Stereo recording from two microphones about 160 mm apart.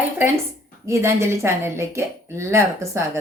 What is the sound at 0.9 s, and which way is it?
Speech, 15° right (ahead or behind).